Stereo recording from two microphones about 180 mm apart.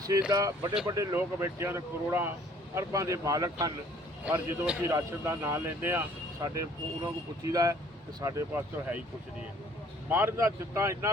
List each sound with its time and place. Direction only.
0.3 s a man's voice: 20° right (ahead or behind)
4.3 s a man's voice: 10° right (ahead or behind)
10.1 s a man's voice: 15° right (ahead or behind)